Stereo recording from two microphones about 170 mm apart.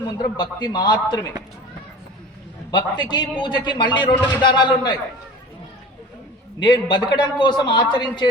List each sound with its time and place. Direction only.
0.2 s a man's voice: 25° left (ahead or behind)
2.7 s a man's voice: 25° left (ahead or behind)
6.6 s a man's voice: 25° left (ahead or behind)